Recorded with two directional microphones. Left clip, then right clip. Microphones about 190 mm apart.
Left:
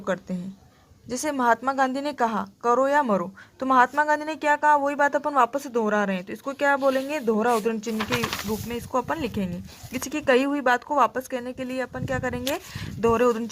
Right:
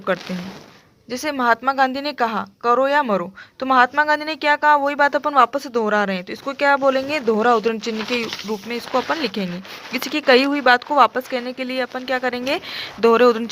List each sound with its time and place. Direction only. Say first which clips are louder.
1.1 s a woman's voice: right 4 dB; 15° right (ahead or behind)
9.0 s a woman's voice: right 5 dB; 25° right (ahead or behind)